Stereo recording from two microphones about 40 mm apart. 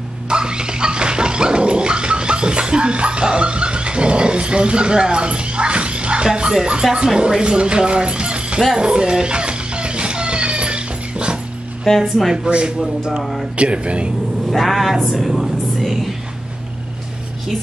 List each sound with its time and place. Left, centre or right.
0.3 s dog: right
6.5 s speech: centre
8.7 s a sound: right
11.9 s speech: centre
12.4 s speech: right
13.2 s speech: centre
13.6 s speech: right
14.5 s speech: centre
15.8 s a sound: centre